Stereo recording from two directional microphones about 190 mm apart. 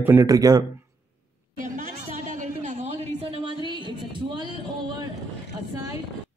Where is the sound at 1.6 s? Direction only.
45° right (ahead or behind); by 4.4 s 25° right (ahead or behind).